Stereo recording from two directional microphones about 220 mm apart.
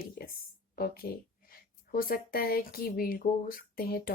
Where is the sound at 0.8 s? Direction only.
45° left (ahead or behind).